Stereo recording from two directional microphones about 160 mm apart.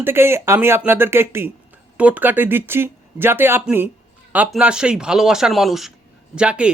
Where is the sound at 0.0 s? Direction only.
15° right (ahead or behind).